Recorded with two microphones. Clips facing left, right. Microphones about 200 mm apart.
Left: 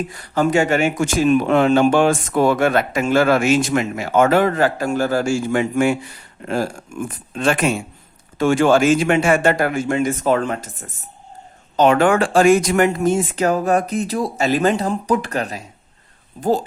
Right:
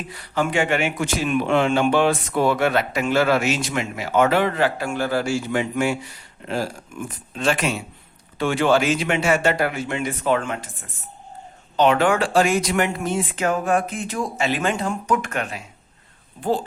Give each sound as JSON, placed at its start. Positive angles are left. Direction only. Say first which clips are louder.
{"t": 0.1, "sound": "a man's voice", "louder": "left 4 dB", "side_deg": 45}